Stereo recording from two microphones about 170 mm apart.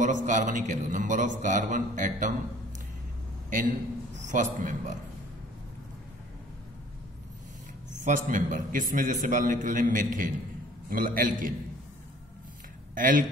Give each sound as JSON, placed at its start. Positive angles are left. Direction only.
{"t": 0.0, "sound": "a man's voice", "side_deg": -45}
{"t": 3.4, "sound": "a man's voice", "side_deg": -50}
{"t": 8.0, "sound": "a man's voice", "side_deg": -50}
{"t": 12.9, "sound": "speech", "side_deg": -50}